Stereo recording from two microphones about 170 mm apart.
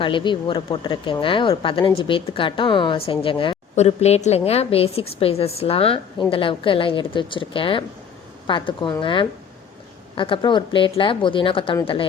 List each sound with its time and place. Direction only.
0.0 s a woman's voice: 30° left (ahead or behind)